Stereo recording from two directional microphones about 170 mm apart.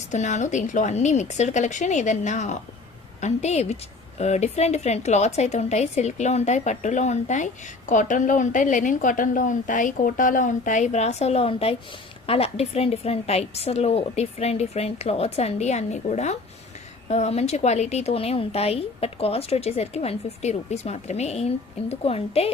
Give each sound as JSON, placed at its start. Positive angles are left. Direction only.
{"t": 0.1, "sound": "a woman's voice", "side_deg": 45}